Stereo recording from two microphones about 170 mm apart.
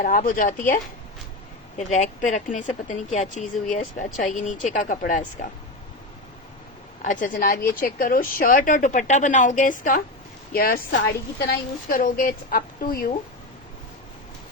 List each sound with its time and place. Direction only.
0.0 s a woman's voice: 55° left (ahead or behind)
1.8 s a woman's voice: 45° left (ahead or behind)
7.0 s a woman's voice: 50° left (ahead or behind)